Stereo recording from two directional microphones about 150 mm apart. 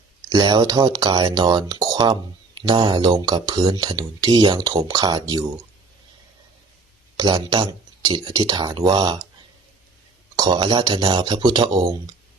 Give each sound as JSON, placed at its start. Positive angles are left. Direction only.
{"t": 0.3, "sound": "speech", "side_deg": -25}
{"t": 7.2, "sound": "speech", "side_deg": -30}
{"t": 10.3, "sound": "speech", "side_deg": -30}